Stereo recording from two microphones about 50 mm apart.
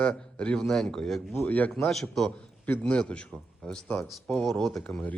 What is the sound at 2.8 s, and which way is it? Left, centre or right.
Speech, left.